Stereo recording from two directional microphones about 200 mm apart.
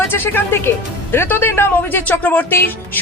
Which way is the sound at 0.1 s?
10° left (ahead or behind).